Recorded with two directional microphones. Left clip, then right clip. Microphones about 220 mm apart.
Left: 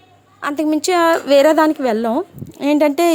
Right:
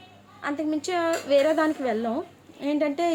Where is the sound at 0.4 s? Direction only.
45° left (ahead or behind).